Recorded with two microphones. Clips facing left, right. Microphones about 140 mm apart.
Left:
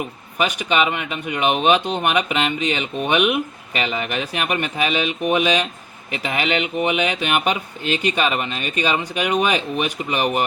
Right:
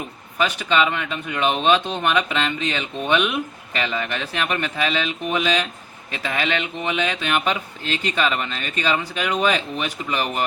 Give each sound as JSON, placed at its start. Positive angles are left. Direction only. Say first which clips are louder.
{"t": 0.3, "sound": "speech", "louder": "left 1 dB", "side_deg": 15}